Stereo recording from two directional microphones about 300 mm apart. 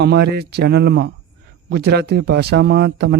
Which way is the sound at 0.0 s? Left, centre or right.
Right.